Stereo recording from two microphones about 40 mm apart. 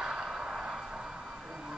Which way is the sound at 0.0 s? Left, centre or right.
Centre.